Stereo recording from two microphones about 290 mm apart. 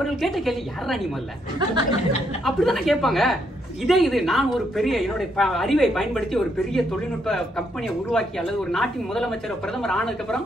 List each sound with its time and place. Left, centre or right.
0.0 s a woman's voice: centre
1.6 s speech: centre
2.4 s a woman's voice: centre